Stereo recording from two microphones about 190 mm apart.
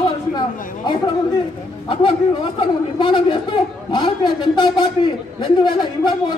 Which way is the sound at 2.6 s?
25° left (ahead or behind).